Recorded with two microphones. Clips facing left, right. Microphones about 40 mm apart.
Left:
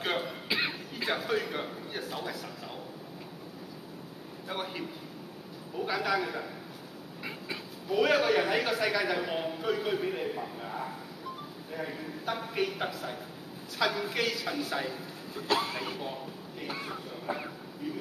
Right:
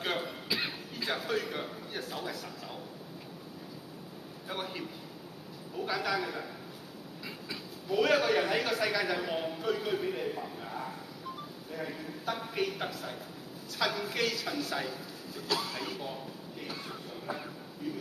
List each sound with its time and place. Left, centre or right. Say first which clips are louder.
0.0 s cough: left 2 dB; centre
0.5 s a man's voice: left 5 dB; left; by 2.8 s centre
4.5 s a man's voice: left 2 dB; centre
7.2 s a sound: left 4 dB; left
7.9 s a man's voice: left 1 dB; centre
15.3 s speech: left 4 dB; left; by 17.9 s centre